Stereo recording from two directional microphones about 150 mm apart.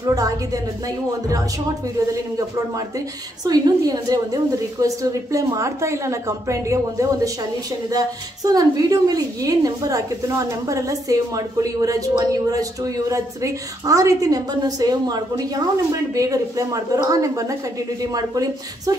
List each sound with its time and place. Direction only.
0.0 s a woman's voice: 25° right (ahead or behind)
3.4 s a woman's voice: 25° right (ahead or behind)
8.5 s a woman's voice: 25° right (ahead or behind)